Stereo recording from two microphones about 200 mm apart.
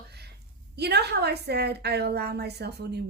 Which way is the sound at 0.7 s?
55° right (ahead or behind).